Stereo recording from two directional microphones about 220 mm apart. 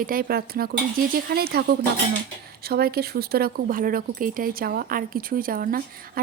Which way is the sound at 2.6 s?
45° right (ahead or behind).